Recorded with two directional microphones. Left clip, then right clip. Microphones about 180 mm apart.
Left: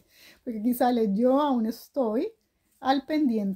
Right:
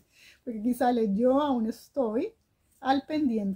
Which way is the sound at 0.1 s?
30° left (ahead or behind).